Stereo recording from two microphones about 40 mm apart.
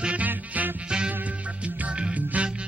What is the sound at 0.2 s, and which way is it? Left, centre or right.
Music, right.